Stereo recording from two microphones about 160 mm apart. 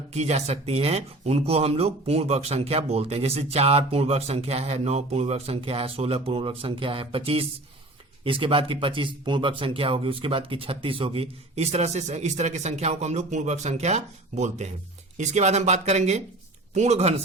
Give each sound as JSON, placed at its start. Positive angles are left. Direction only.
{"t": 0.1, "sound": "speech", "side_deg": -45}